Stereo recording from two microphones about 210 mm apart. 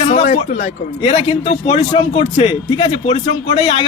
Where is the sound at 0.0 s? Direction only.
30° left (ahead or behind).